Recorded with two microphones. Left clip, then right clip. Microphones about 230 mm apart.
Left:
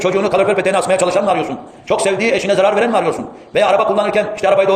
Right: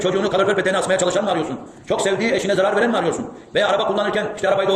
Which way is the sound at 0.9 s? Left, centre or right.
Left.